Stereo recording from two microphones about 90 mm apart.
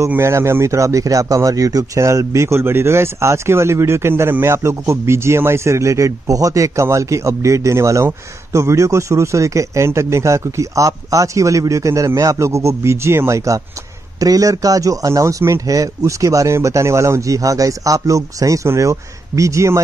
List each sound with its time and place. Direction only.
0.1 s speech: 30° right (ahead or behind)